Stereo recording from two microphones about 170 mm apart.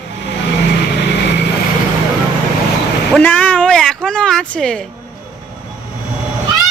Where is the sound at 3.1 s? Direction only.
10° left (ahead or behind).